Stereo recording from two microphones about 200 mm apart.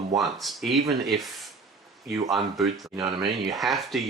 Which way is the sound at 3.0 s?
25° right (ahead or behind).